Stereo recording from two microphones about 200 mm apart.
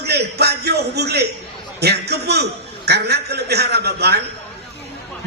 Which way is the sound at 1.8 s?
55° right (ahead or behind).